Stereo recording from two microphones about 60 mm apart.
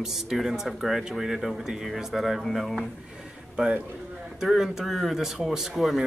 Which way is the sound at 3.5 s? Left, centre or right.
Centre.